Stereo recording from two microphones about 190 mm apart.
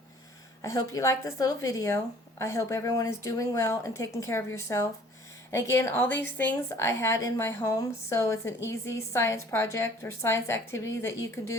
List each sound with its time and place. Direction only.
0.6 s a woman's voice: 15° left (ahead or behind)